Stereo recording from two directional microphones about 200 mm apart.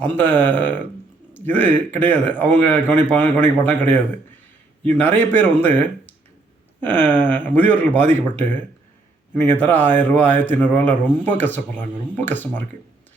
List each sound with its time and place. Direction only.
0.2 s a man's voice: 10° left (ahead or behind)